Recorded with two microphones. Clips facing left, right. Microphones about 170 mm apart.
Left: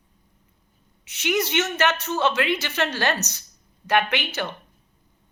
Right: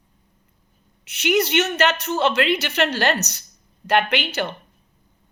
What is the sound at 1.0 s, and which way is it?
Speech, 70° right (ahead or behind).